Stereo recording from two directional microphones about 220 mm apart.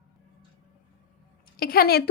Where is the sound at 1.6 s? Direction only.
45° left (ahead or behind).